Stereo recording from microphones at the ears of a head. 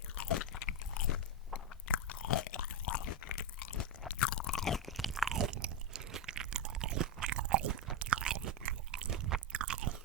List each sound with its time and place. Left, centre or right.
0.2 s crunch: left
1.9 s chewing: left
5.3 s chewing: right